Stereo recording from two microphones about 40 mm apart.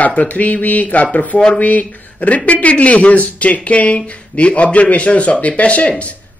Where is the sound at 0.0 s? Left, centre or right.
Left.